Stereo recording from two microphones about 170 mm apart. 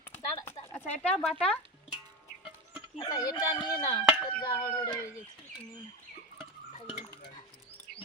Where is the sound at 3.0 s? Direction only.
25° left (ahead or behind).